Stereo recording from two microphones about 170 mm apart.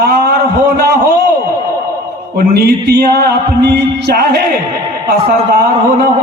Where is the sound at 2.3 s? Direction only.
65° right (ahead or behind).